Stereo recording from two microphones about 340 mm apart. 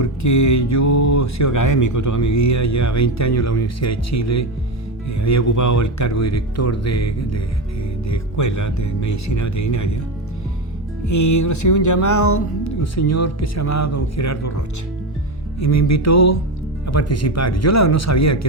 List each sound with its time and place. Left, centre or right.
0.0 s speech: left
11.0 s speech: left